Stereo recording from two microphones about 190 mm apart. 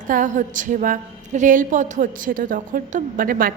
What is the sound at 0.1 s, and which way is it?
A woman's voice, 45° right (ahead or behind).